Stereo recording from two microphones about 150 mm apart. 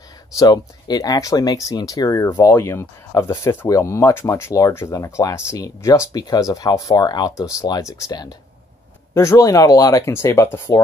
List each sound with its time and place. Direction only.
0.4 s speech: 25° left (ahead or behind)